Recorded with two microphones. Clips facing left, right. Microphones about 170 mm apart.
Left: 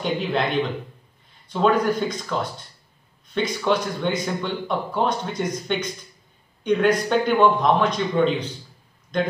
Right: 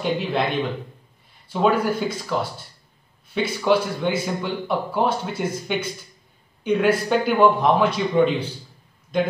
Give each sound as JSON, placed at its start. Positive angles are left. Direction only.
{"t": 0.0, "sound": "a man's voice", "side_deg": -5}